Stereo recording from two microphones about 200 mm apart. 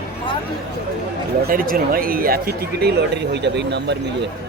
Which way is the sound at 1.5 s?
45° right (ahead or behind).